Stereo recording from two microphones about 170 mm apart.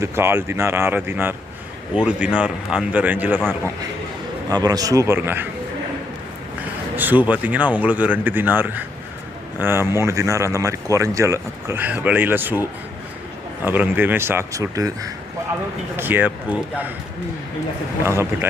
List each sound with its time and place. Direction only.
0.0 s speech: 15° right (ahead or behind)
4.4 s a man's voice: 20° right (ahead or behind)
6.9 s speech: 10° right (ahead or behind)
13.7 s speech: 10° right (ahead or behind)